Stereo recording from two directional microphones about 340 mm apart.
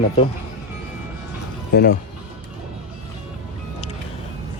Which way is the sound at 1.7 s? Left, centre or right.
Left.